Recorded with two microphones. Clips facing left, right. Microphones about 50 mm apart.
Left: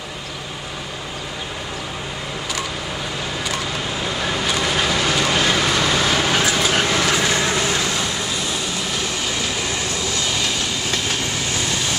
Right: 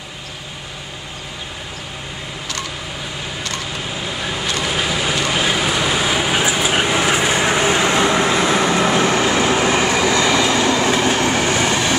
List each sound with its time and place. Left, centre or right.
3.4 s vehicle: centre; by 10.9 s right
11.0 s train: right